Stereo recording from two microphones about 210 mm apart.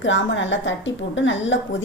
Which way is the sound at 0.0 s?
60° left (ahead or behind).